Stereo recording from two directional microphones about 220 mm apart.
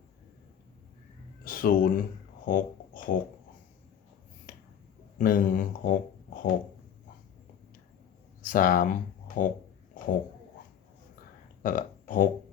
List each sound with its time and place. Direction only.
1.5 s speech: 40° left (ahead or behind)
4.5 s a sound: 40° left (ahead or behind)
5.1 s speech: 35° left (ahead or behind)
8.4 s speech: 40° left (ahead or behind)
11.6 s speech: 40° left (ahead or behind)